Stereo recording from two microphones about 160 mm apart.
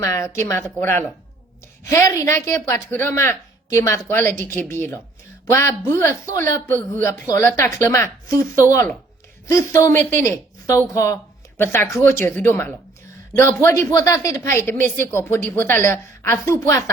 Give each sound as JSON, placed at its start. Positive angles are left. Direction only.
{"t": 0.0, "sound": "a woman's voice", "side_deg": 15}